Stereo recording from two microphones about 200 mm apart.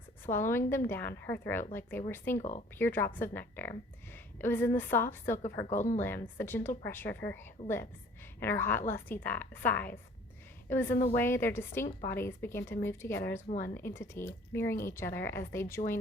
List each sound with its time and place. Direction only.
0.3 s a woman's voice: 10° left (ahead or behind)
2.4 s speech: 35° left (ahead or behind)
2.7 s a woman's voice: 10° left (ahead or behind)
5.6 s speech: 40° left (ahead or behind)
6.0 s a woman's voice: 10° left (ahead or behind)